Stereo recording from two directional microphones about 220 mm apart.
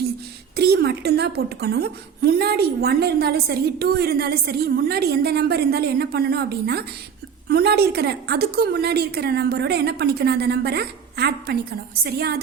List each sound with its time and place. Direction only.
0.5 s a woman's voice: 45° right (ahead or behind)